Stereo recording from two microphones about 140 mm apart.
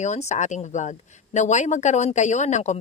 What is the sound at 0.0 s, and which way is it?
A woman's voice, 55° left (ahead or behind).